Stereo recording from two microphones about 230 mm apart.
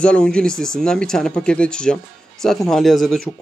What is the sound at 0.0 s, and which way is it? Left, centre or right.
Speech, centre.